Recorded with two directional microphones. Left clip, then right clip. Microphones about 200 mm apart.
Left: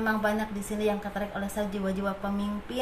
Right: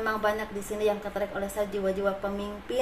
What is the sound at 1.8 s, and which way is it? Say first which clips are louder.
Speech: right 4 dB; 30° right (ahead or behind).